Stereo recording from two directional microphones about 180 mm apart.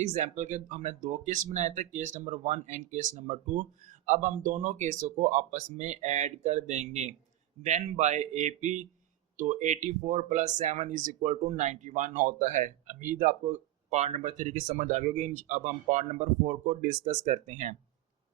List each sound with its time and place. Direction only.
0.0 s speech: 40° right (ahead or behind)